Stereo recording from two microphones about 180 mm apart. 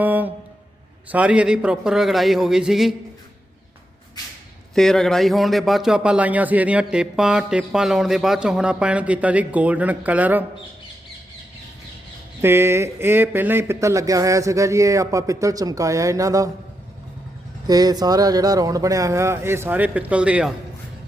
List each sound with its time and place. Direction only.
0.0 s a sound: 10° right (ahead or behind)
1.1 s speech: 5° right (ahead or behind)
4.2 s a sound: 20° left (ahead or behind)
4.7 s speech: centre (ahead or behind)
12.4 s speech: 15° right (ahead or behind)
17.7 s speech: 20° right (ahead or behind)